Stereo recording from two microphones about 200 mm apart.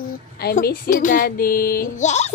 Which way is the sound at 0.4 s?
50° left (ahead or behind).